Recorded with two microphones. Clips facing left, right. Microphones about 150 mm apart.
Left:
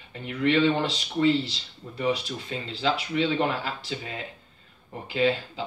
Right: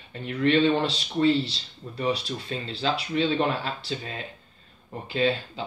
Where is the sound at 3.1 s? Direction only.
30° right (ahead or behind).